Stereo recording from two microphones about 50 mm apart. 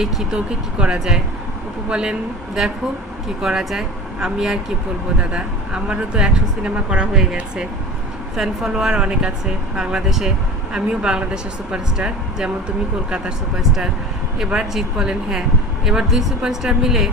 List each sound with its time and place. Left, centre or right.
0.0 s speech: centre
3.2 s speech: centre
14.3 s speech: centre